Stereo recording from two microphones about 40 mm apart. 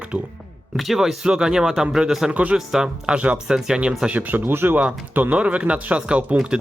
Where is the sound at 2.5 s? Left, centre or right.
Centre.